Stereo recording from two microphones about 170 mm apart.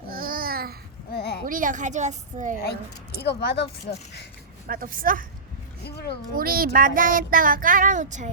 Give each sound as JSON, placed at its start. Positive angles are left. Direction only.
{"t": 0.1, "sound": "babbling", "side_deg": -60}
{"t": 1.1, "sound": "a sound", "side_deg": 70}
{"t": 1.5, "sound": "speech", "side_deg": -50}
{"t": 3.2, "sound": "speech", "side_deg": 75}
{"t": 4.6, "sound": "a woman's voice", "side_deg": -55}
{"t": 5.8, "sound": "speech", "side_deg": 75}
{"t": 6.3, "sound": "a woman's voice", "side_deg": -60}